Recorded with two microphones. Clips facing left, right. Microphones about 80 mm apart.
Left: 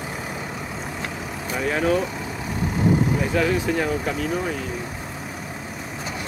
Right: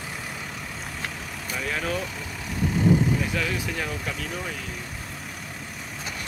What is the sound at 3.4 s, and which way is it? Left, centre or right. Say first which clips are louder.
Speech: left 8 dB; left.